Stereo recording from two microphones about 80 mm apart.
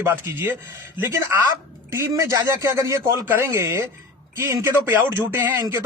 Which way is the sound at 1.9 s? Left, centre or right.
Right.